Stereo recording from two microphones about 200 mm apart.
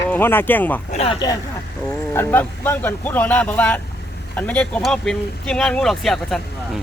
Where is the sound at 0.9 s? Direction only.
25° left (ahead or behind).